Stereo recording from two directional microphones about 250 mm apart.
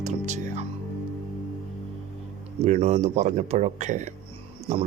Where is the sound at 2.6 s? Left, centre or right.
Right.